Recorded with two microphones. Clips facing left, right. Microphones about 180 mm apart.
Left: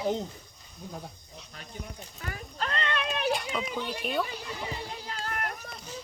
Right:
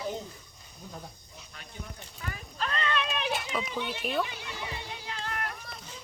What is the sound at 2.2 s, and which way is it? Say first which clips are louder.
Speech: left 1 dB; 40° left (ahead or behind).